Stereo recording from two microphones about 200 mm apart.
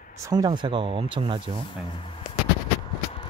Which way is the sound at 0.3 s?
20° right (ahead or behind).